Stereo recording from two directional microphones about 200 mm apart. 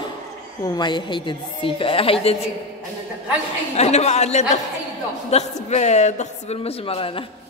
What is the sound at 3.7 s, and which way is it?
A woman's voice, 35° left (ahead or behind).